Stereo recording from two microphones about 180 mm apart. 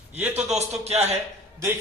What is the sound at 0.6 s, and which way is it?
Speech, 35° right (ahead or behind).